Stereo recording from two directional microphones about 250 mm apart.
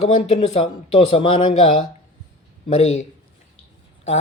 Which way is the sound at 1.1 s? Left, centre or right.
Left.